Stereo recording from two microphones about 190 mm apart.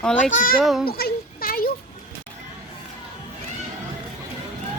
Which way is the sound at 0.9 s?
55° left (ahead or behind).